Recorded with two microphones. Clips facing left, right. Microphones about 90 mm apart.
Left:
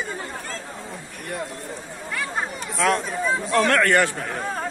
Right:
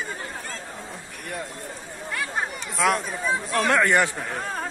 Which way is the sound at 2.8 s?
Centre (ahead or behind).